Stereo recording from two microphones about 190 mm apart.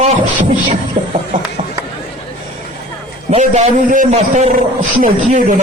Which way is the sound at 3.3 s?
40° right (ahead or behind).